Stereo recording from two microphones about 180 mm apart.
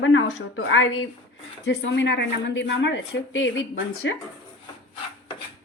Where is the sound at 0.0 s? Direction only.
90° left.